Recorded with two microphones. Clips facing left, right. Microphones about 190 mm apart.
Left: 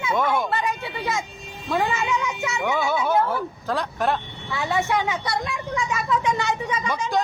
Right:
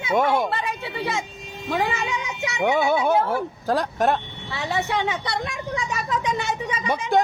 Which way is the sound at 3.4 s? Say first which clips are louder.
Right 3 dB; 40° right (ahead or behind).